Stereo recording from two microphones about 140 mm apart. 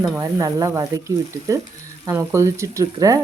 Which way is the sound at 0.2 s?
20° right (ahead or behind).